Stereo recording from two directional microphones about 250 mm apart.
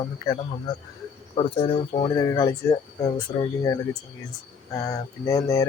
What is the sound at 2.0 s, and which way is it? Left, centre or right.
Mantra, centre.